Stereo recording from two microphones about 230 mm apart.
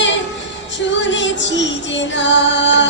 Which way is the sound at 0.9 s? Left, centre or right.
Left.